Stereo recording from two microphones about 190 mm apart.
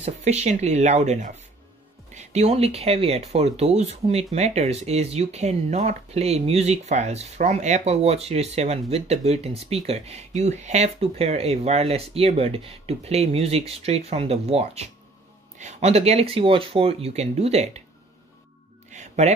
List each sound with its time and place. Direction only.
0.0 s speech: 35° right (ahead or behind)
18.9 s music: 35° right (ahead or behind)